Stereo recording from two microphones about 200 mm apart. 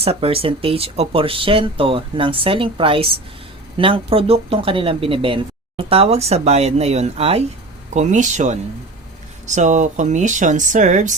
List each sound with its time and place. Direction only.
0.0 s speech: 30° right (ahead or behind)
9.6 s speech: 40° right (ahead or behind)